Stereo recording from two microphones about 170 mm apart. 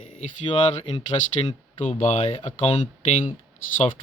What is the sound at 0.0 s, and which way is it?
Speech, 50° left (ahead or behind).